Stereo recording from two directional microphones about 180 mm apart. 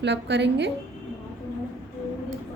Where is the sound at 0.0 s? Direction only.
80° right.